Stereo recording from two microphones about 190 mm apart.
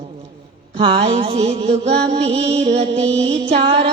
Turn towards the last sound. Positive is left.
turn(degrees=-30)  # may be behind; listen again after turning